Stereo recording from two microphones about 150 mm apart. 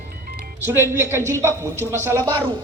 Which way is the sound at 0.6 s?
15° right (ahead or behind).